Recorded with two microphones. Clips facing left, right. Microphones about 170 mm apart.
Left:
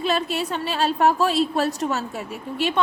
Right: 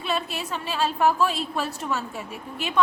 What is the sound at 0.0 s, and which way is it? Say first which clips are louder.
A woman's voice: left 5 dB; 35° left (ahead or behind).